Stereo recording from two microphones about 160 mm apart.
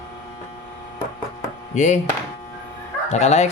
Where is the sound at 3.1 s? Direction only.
45° left (ahead or behind).